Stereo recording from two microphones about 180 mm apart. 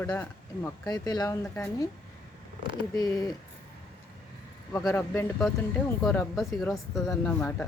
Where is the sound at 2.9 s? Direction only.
20° left (ahead or behind).